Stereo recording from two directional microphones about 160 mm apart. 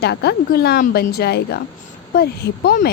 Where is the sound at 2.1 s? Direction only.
70° left (ahead or behind).